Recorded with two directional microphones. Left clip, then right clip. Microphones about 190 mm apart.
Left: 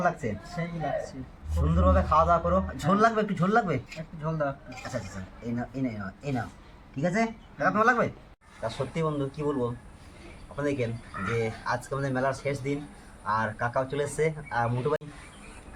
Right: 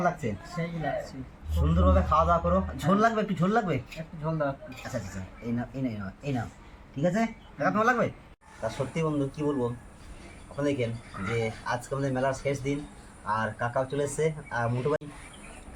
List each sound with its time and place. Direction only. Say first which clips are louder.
0.0 s a man's voice: left 1 dB; 10° right (ahead or behind)
4.2 s speech: even; 5° right (ahead or behind)
4.7 s a man's voice: left 1 dB; 15° right (ahead or behind)